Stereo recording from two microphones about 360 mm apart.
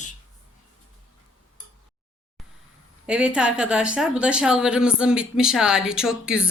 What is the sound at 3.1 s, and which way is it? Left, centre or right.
Speech, centre.